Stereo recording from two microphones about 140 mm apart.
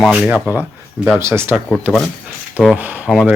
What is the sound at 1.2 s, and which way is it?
Speech, 20° right (ahead or behind).